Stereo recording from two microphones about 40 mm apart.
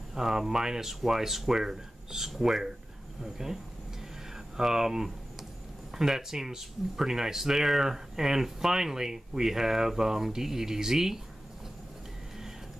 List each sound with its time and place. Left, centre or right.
0.1 s speech: centre
4.6 s speech: centre